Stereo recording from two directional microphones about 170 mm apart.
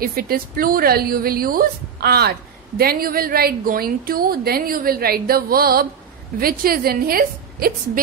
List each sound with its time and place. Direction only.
0.0 s a woman's voice: 60° right (ahead or behind)